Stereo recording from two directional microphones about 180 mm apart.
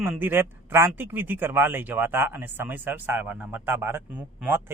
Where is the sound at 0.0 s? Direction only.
10° right (ahead or behind).